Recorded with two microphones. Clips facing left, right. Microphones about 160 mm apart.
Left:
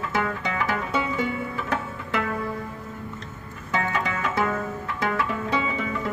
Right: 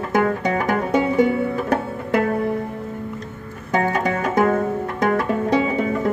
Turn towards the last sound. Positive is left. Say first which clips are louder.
# right 8 dB
turn(degrees=-45)  # may be behind; listen again after turning